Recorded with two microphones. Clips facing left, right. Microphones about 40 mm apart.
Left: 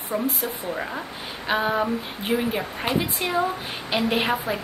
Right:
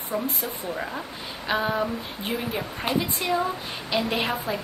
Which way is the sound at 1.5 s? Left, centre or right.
Centre.